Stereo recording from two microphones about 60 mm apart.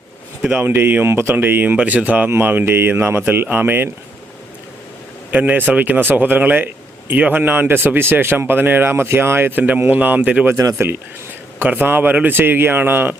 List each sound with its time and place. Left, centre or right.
0.4 s speech: right
5.3 s speech: right
10.2 s speech: centre
11.6 s speech: right